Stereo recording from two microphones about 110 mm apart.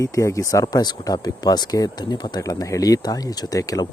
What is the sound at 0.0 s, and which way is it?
Speech, 30° left (ahead or behind).